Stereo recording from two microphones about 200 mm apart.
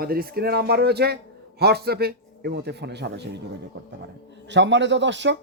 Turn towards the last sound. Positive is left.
turn(degrees=-65)  # may be behind; listen again after turning